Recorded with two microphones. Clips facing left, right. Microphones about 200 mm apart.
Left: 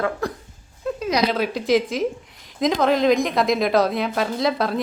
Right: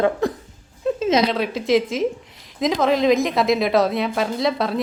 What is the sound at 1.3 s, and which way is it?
A woman's voice, centre (ahead or behind).